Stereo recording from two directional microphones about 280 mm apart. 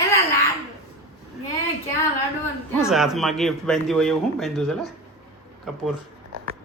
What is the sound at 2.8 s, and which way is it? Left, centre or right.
A man's voice, centre.